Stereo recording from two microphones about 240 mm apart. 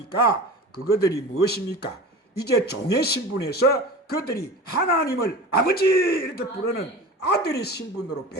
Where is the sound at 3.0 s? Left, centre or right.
Left.